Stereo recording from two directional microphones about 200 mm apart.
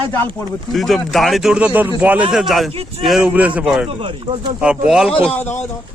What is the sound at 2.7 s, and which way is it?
Speech, 30° right (ahead or behind).